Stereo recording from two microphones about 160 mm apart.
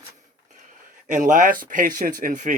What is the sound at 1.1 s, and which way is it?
Speech, 50° right (ahead or behind).